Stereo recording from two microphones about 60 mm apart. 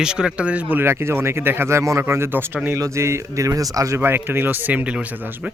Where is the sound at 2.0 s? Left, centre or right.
Right.